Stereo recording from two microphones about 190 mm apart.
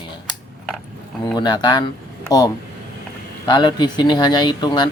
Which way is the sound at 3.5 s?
25° left (ahead or behind).